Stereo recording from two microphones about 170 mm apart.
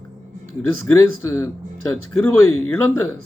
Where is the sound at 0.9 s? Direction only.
15° left (ahead or behind).